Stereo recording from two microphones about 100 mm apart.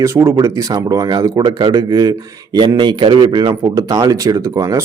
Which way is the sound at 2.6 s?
50° right (ahead or behind).